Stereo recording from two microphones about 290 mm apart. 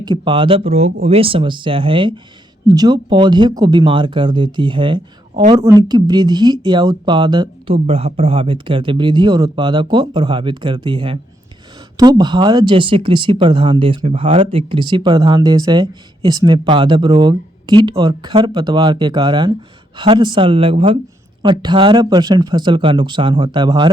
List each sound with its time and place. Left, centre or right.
0.0 s speech: centre